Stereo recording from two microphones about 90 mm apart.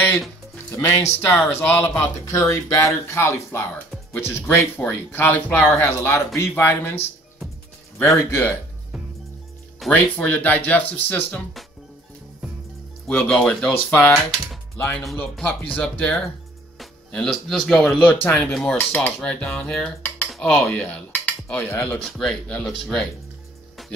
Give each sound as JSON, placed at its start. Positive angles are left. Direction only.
{"t": 0.7, "sound": "speech", "side_deg": 30}
{"t": 2.2, "sound": "speech", "side_deg": 35}
{"t": 8.3, "sound": "speech", "side_deg": 25}
{"t": 9.8, "sound": "speech", "side_deg": 0}
{"t": 10.1, "sound": "speech", "side_deg": 20}
{"t": 13.0, "sound": "a sound", "side_deg": 10}
{"t": 13.8, "sound": "speech", "side_deg": 25}
{"t": 16.7, "sound": "speech", "side_deg": 5}
{"t": 18.2, "sound": "a sound", "side_deg": 15}
{"t": 18.8, "sound": "speech", "side_deg": 20}
{"t": 19.2, "sound": "a sound", "side_deg": 10}
{"t": 20.7, "sound": "speech", "side_deg": 15}
{"t": 21.9, "sound": "a sound", "side_deg": 5}
{"t": 22.7, "sound": "speech", "side_deg": 5}